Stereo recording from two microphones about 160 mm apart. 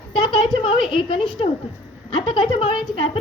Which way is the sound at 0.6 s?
35° left (ahead or behind).